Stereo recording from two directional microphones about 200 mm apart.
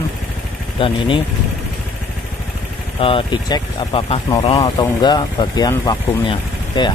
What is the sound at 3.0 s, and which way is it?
Speech, 25° left (ahead or behind).